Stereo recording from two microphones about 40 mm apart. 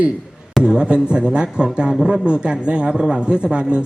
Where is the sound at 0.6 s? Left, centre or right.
Right.